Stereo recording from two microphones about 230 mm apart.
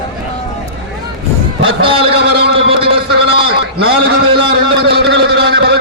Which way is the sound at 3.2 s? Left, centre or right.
Right.